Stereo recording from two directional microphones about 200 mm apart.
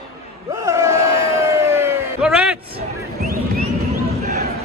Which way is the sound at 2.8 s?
50° right (ahead or behind).